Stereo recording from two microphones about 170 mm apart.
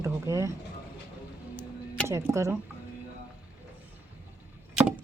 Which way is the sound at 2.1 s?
15° right (ahead or behind).